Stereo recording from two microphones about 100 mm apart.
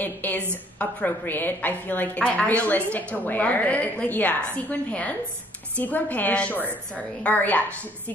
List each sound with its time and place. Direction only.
0.0 s a woman's voice: 15° left (ahead or behind)